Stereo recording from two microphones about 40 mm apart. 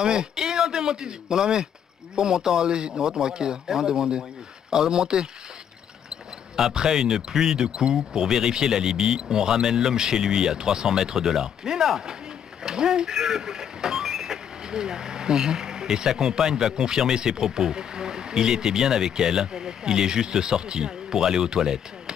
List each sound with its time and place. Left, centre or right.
0.0 s speech: centre